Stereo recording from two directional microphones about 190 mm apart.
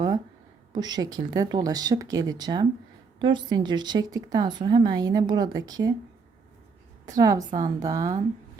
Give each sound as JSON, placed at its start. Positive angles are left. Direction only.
{"t": 0.7, "sound": "a woman's voice", "side_deg": -20}
{"t": 7.0, "sound": "a woman's voice", "side_deg": -20}